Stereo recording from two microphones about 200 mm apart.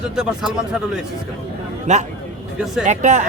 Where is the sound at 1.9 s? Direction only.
35° right (ahead or behind).